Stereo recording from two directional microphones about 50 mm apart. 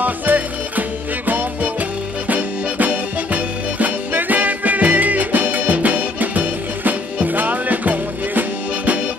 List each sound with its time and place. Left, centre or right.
0.0 s music: right